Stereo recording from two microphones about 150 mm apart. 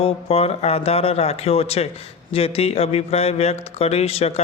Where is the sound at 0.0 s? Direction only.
40° left (ahead or behind).